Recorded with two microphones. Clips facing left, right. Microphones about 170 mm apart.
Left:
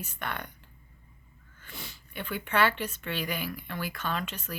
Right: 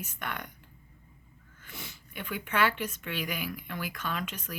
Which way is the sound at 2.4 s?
10° right (ahead or behind).